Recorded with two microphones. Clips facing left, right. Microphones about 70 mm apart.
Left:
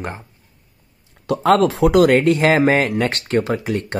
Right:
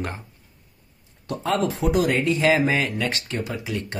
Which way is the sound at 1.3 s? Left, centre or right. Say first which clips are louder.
Left 9 dB; left.